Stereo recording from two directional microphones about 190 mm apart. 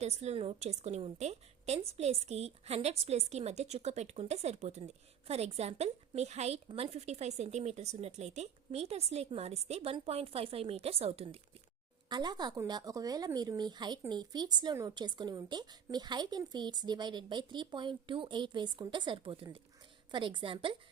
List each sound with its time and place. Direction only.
0.0 s a woman's voice: 35° right (ahead or behind)